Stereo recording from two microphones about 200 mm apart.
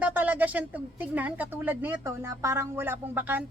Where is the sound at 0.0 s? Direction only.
10° right (ahead or behind).